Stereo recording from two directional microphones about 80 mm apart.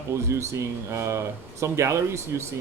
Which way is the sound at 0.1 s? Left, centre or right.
Right.